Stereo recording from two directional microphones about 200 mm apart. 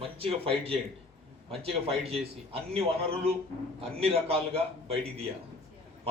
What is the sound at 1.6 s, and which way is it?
Speech, 30° right (ahead or behind).